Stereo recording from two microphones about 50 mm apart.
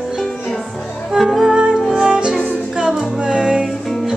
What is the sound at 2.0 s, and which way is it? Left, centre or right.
Music, centre.